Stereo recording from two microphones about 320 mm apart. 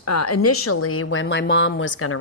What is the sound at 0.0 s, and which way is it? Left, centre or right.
A woman's voice, left.